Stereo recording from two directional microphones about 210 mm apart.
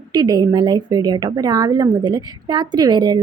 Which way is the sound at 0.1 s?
20° right (ahead or behind).